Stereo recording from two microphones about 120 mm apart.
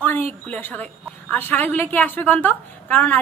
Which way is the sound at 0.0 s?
15° left (ahead or behind).